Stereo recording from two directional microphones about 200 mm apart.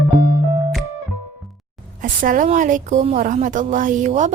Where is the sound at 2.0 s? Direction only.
40° right (ahead or behind).